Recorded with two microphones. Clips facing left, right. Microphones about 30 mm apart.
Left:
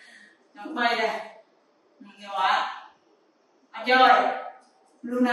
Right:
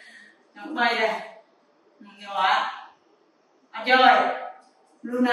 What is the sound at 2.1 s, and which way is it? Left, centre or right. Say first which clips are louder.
Speech: right 2 dB; centre.